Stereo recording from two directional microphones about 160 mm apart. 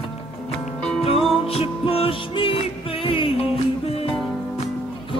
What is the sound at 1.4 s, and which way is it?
Music, 35° left (ahead or behind).